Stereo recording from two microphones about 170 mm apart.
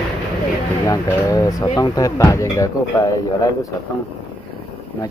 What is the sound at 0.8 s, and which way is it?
Speech, 20° left (ahead or behind).